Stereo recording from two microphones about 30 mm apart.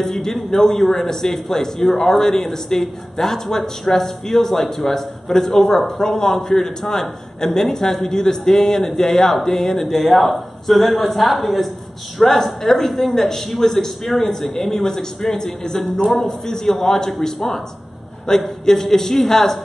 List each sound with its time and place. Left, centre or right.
0.0 s a man's voice: centre
9.8 s a man's voice: centre
14.8 s a man's voice: centre
18.3 s a man's voice: left